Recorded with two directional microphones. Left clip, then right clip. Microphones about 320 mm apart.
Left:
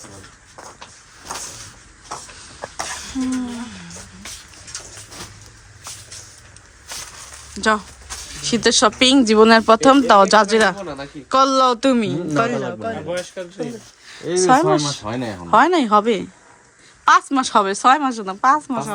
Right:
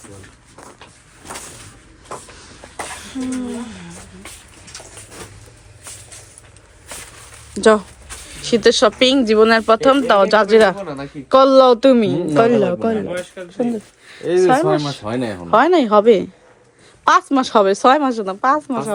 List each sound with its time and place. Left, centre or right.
3.2 s a sound: centre
7.5 s speech: centre
13.1 s speech: left
14.2 s speech: centre